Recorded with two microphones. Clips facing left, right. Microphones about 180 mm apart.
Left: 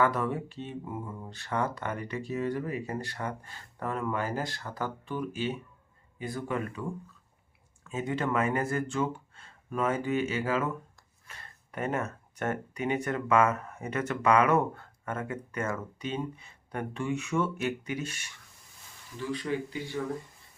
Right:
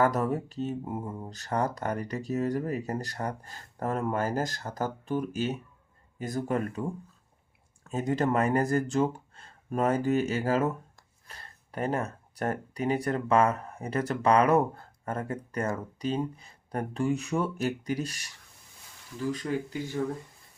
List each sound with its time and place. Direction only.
0.0 s speech: 40° right (ahead or behind)
7.9 s speech: 40° right (ahead or behind)